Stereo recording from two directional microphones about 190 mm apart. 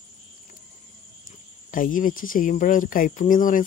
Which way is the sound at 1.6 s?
45° left (ahead or behind).